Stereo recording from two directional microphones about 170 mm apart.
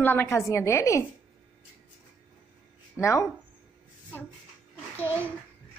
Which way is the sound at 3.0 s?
15° left (ahead or behind).